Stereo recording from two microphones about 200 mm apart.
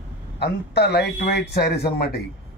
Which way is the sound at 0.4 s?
55° left (ahead or behind).